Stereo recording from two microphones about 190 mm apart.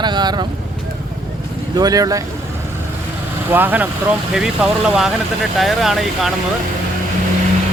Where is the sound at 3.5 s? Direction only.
10° right (ahead or behind).